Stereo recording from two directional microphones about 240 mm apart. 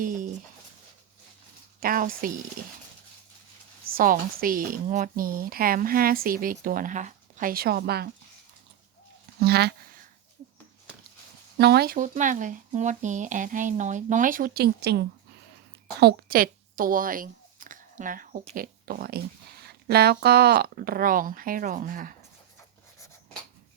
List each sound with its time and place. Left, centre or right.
0.0 s speech: right
1.8 s speech: right
3.9 s speech: right
9.4 s speech: right
11.5 s speech: right